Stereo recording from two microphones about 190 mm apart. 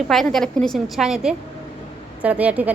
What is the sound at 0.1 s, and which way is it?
A woman's voice, centre (ahead or behind).